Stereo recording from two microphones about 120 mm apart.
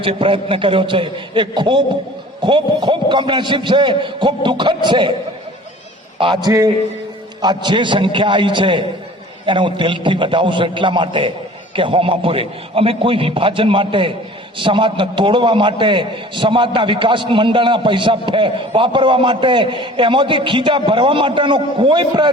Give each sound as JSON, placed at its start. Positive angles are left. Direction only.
{"t": 0.0, "sound": "a man's voice", "side_deg": -50}
{"t": 6.1, "sound": "a man's voice", "side_deg": -40}